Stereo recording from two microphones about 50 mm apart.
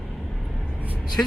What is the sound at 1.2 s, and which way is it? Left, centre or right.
Speech, left.